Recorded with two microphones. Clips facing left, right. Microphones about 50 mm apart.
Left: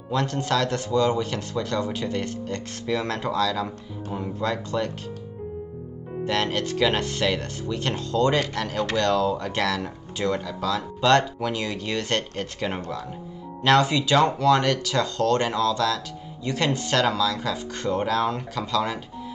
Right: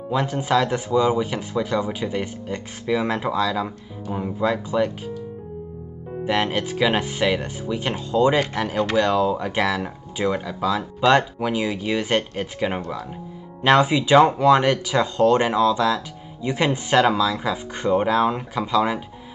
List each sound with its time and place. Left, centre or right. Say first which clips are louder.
0.1 s speech: right 3 dB; centre
6.2 s speech: right 3 dB; centre